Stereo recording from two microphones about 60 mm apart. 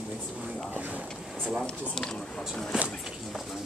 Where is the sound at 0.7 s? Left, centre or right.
Right.